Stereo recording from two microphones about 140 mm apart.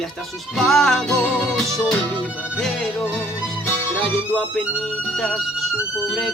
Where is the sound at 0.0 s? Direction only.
Centre (ahead or behind).